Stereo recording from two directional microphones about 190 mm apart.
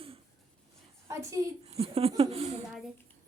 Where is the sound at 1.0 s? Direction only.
15° right (ahead or behind).